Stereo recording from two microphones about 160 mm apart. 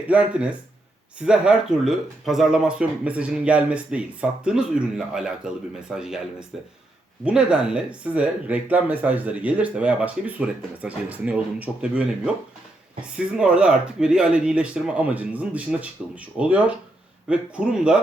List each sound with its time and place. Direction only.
0.1 s speech: 5° right (ahead or behind)